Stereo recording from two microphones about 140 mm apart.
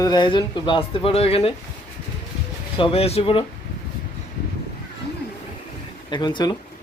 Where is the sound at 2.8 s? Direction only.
45° left (ahead or behind).